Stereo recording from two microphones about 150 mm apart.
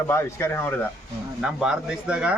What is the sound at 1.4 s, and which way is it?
Speech, 5° right (ahead or behind).